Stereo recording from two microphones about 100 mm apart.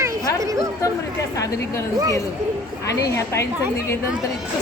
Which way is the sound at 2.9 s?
30° left (ahead or behind).